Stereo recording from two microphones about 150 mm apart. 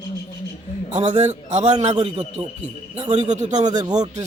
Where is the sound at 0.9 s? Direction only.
50° right (ahead or behind).